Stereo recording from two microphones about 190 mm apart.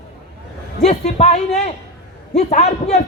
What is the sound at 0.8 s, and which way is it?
A man's voice, 35° left (ahead or behind).